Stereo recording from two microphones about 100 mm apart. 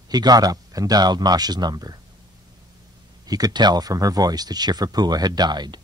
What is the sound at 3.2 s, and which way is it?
Speech, 40° right (ahead or behind).